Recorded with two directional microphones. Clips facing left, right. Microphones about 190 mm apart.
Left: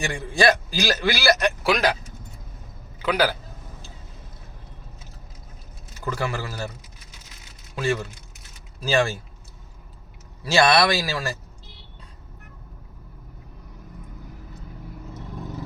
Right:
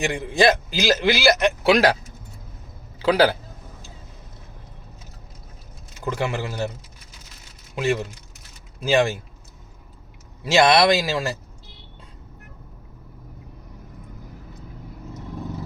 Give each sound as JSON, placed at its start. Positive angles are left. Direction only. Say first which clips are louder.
{"t": 0.0, "sound": "a man's voice", "louder": "right 2 dB", "side_deg": -20}
{"t": 3.0, "sound": "a man's voice", "louder": "right 5 dB", "side_deg": -30}
{"t": 6.1, "sound": "a man's voice", "louder": "right 2 dB", "side_deg": -20}
{"t": 7.8, "sound": "a man's voice", "louder": "right 2 dB", "side_deg": -20}
{"t": 10.4, "sound": "a man's voice", "louder": "right 2 dB", "side_deg": -20}